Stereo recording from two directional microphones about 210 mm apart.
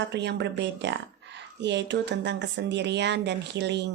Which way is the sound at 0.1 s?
55° right (ahead or behind).